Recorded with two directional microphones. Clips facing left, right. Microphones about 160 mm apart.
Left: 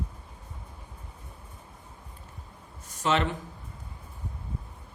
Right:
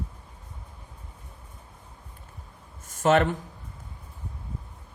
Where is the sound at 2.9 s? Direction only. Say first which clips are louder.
Right 6 dB; 50° right (ahead or behind).